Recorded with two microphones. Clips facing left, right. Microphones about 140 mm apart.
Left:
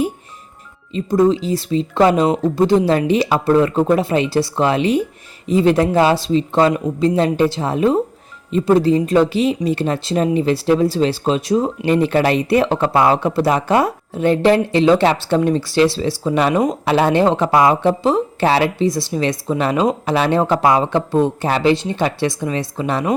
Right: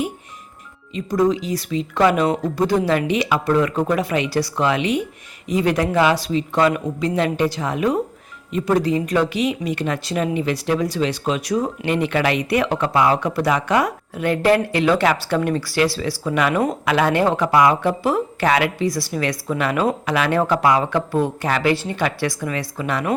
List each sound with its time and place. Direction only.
0.9 s speech: 25° left (ahead or behind)